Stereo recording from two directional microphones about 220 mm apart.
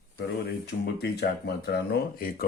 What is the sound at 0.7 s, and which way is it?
Speech, 50° left (ahead or behind).